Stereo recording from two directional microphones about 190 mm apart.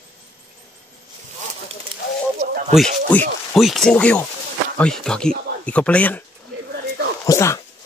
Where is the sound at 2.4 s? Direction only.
35° right (ahead or behind).